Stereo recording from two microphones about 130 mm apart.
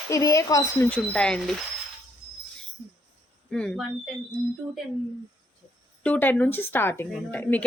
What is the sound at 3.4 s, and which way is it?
Speech, 5° left (ahead or behind).